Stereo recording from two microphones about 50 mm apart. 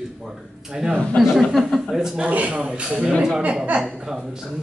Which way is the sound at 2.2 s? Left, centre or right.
Right.